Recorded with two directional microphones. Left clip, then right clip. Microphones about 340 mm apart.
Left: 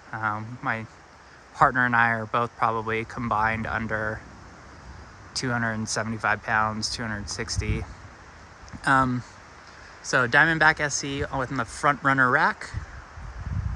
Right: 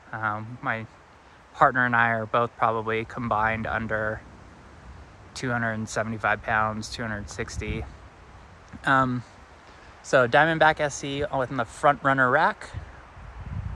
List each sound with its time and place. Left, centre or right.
0.1 s speech: centre
5.3 s speech: centre
8.8 s speech: centre